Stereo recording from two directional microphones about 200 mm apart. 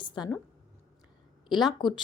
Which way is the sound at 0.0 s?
20° left (ahead or behind).